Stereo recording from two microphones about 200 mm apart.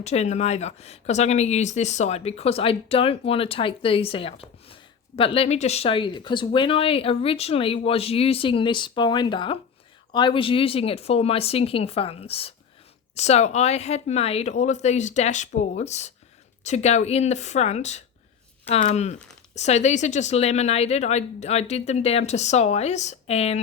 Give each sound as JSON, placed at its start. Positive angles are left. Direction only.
{"t": 0.0, "sound": "a woman's voice", "side_deg": 35}